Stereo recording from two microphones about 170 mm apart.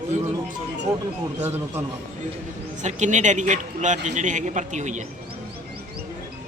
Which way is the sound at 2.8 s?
45° right (ahead or behind).